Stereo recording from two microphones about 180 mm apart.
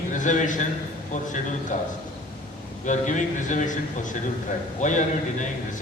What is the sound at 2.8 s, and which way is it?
Speech, 45° left (ahead or behind).